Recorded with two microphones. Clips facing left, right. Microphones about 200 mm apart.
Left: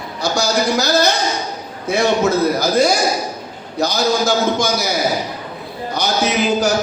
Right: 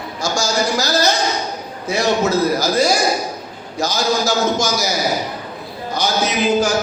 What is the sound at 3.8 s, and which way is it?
A man's voice, 60° left (ahead or behind).